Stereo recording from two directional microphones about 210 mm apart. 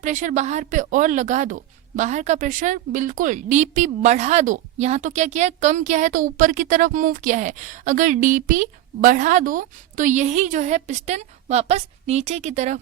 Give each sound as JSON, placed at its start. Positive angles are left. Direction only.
{"t": 0.0, "sound": "a woman's voice", "side_deg": -35}